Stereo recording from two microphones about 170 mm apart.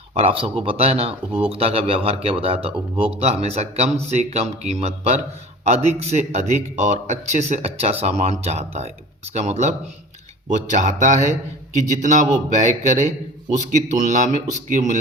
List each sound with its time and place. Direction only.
0.1 s speech: 35° right (ahead or behind)